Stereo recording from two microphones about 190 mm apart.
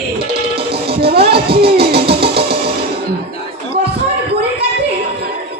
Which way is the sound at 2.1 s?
55° right (ahead or behind).